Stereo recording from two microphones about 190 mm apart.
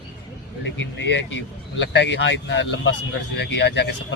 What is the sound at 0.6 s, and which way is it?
Speech, 70° left (ahead or behind).